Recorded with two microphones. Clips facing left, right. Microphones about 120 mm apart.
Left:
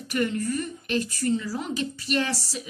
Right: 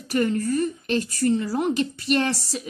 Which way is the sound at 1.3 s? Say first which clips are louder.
Right 5 dB; 55° right (ahead or behind).